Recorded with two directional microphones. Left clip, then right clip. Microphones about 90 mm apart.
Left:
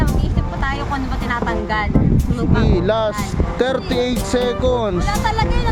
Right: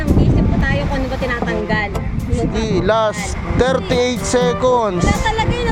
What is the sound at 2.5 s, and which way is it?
Speech, 40° left (ahead or behind).